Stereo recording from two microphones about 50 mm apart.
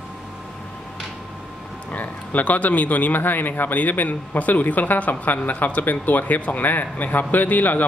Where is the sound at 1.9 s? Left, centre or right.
Left.